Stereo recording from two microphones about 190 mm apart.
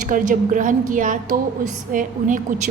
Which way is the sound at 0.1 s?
45° right (ahead or behind).